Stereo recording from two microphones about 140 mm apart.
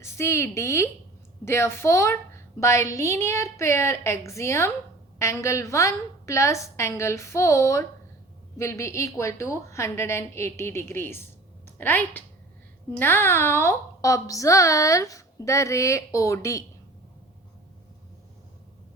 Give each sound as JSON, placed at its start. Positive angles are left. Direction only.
{"t": 0.0, "sound": "a woman's voice", "side_deg": 20}